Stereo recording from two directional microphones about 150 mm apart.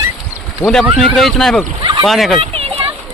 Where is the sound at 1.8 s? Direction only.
30° right (ahead or behind).